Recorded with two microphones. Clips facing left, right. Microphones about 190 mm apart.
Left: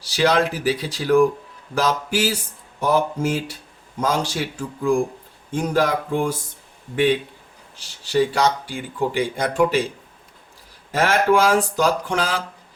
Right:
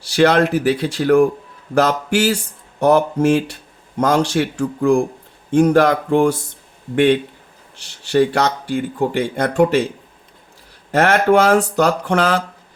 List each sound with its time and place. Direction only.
0.0 s speech: 65° right (ahead or behind)
10.9 s speech: 60° right (ahead or behind)